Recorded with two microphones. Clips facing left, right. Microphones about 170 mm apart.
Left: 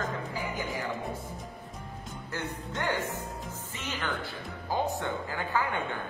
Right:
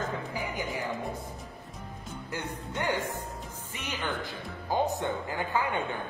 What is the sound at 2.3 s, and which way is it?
A man's voice, 10° right (ahead or behind).